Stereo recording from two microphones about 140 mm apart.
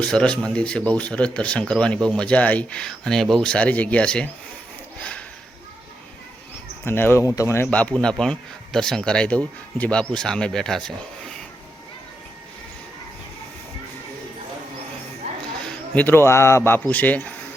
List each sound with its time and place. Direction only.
0.0 s speech: 5° left (ahead or behind)
4.9 s a sound: 10° left (ahead or behind)
6.8 s speech: 15° left (ahead or behind)
15.6 s speech: 10° left (ahead or behind)